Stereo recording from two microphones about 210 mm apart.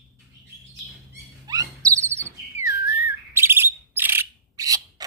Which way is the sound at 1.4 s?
15° right (ahead or behind).